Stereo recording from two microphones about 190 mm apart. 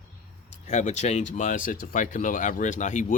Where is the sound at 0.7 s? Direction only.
40° left (ahead or behind).